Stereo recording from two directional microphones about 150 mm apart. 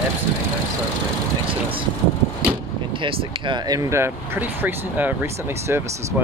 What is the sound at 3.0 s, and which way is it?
Speech, 35° right (ahead or behind).